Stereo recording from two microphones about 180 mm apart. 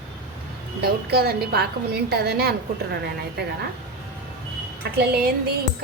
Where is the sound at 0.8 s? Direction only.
60° right (ahead or behind).